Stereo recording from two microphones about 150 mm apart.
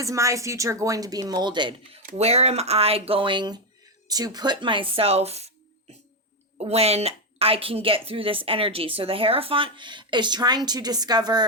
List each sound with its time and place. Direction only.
0.0 s a woman's voice: 20° right (ahead or behind)
2.1 s a woman's voice: 45° right (ahead or behind)
6.6 s a woman's voice: 45° right (ahead or behind); by 11.4 s 30° right (ahead or behind)